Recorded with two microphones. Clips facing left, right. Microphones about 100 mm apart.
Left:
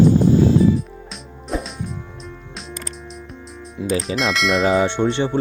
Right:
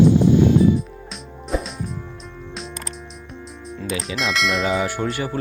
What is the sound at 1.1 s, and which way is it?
Music, centre (ahead or behind).